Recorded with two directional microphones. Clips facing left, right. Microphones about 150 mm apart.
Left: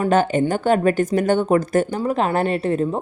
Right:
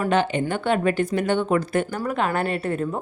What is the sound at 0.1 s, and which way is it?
A woman's voice, 45° left (ahead or behind).